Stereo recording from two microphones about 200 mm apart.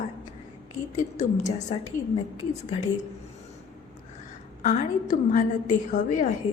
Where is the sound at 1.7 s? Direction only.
30° left (ahead or behind).